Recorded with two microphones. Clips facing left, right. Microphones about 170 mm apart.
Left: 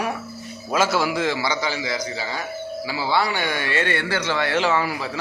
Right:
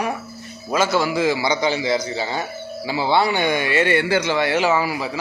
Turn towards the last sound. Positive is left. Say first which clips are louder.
# right 2 dB
turn(degrees=-5)  # may be behind; listen again after turning